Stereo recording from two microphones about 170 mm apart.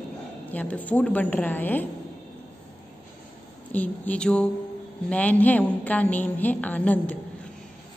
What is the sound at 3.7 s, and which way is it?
Speech, 10° left (ahead or behind).